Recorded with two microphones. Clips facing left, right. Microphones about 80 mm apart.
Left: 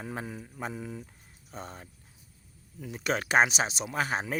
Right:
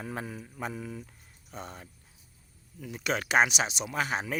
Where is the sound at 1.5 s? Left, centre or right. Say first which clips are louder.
Even; left.